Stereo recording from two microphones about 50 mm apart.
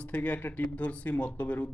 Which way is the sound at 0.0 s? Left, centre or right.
Left.